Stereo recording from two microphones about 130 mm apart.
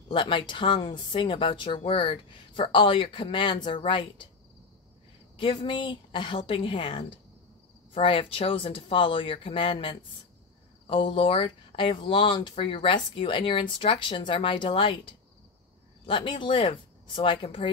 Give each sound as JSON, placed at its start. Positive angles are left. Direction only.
{"t": 0.1, "sound": "speech", "side_deg": 40}
{"t": 5.4, "sound": "speech", "side_deg": 40}